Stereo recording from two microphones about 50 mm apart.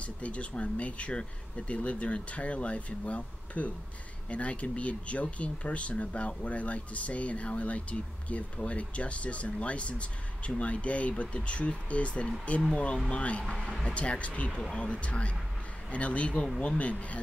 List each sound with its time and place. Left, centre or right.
0.0 s speech: left